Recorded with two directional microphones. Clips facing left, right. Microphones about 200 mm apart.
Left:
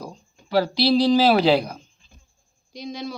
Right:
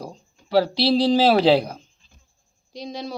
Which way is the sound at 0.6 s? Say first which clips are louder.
Left 2 dB; 30° right (ahead or behind).